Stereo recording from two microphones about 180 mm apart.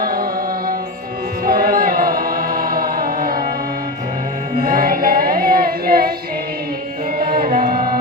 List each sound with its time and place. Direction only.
0.0 s music: 55° right (ahead or behind)
1.5 s music: 55° right (ahead or behind)
4.6 s music: 50° right (ahead or behind)
7.3 s music: 50° right (ahead or behind)